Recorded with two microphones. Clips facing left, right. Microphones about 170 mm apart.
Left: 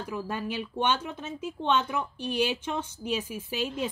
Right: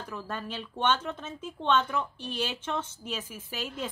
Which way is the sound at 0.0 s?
10° left (ahead or behind).